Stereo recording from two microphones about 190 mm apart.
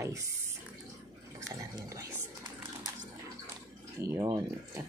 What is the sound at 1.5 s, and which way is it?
Speech, 15° right (ahead or behind).